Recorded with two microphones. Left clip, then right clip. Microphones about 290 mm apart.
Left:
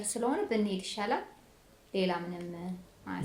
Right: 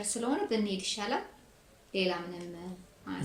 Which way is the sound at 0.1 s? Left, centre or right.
Left.